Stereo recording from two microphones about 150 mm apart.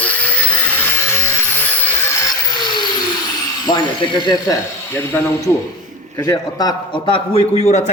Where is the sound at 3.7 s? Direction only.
30° left (ahead or behind).